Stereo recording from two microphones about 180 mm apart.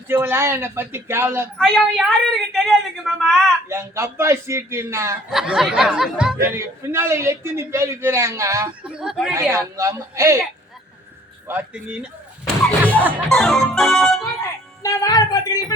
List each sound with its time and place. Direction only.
0.1 s a man's voice: 10° right (ahead or behind)
1.5 s a woman's voice: 5° left (ahead or behind)
3.7 s a man's voice: 15° right (ahead or behind)
5.3 s a woman's voice: centre (ahead or behind)
6.4 s a man's voice: 15° right (ahead or behind)
8.8 s a woman's voice: 5° right (ahead or behind)
9.3 s a man's voice: 15° right (ahead or behind)
11.4 s a man's voice: 10° right (ahead or behind)
13.2 s a woman's voice: centre (ahead or behind)
14.8 s speech: 20° left (ahead or behind)